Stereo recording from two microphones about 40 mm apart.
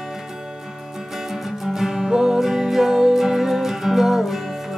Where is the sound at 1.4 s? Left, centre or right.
Centre.